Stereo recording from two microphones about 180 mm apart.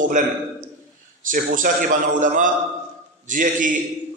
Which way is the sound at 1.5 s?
45° right (ahead or behind).